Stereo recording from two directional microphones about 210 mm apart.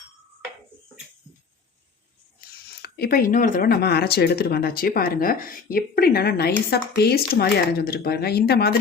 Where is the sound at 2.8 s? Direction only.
45° left (ahead or behind).